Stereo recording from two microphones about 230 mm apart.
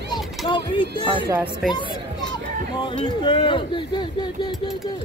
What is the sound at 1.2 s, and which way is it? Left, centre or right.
Speech, centre.